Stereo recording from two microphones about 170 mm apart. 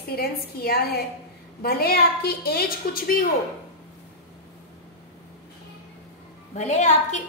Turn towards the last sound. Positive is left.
turn(degrees=45)  # may be behind; listen again after turning